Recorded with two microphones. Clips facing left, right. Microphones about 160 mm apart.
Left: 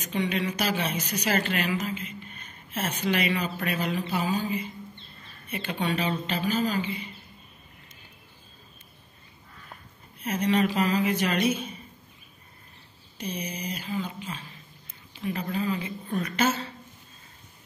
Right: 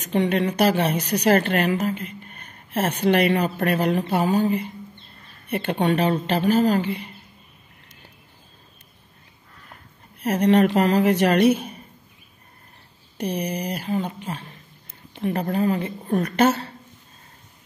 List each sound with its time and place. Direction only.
0.1 s a woman's voice: 55° right (ahead or behind)
10.2 s a woman's voice: 65° right (ahead or behind)
13.2 s speech: 65° right (ahead or behind)